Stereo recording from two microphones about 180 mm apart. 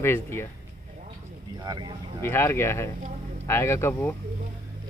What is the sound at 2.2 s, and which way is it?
Speech, 15° left (ahead or behind).